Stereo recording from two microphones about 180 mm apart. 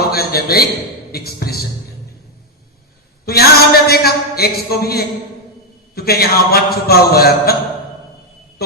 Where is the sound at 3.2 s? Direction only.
60° left (ahead or behind).